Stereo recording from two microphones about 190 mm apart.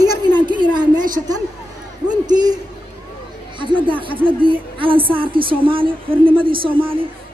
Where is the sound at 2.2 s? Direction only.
20° right (ahead or behind).